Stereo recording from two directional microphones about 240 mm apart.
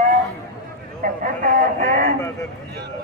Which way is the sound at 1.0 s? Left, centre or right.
Right.